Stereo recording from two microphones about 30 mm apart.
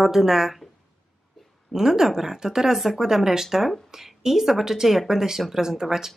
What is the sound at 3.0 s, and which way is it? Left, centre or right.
A woman's voice, centre.